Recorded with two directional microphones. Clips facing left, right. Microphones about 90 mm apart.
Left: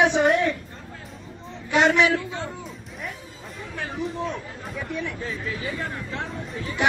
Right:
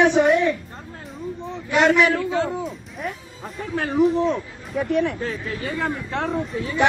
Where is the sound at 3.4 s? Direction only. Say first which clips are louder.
Right 9 dB; 90° right.